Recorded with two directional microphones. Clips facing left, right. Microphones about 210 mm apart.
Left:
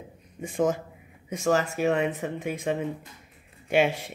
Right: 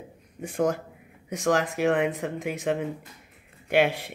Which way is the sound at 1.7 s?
90° right.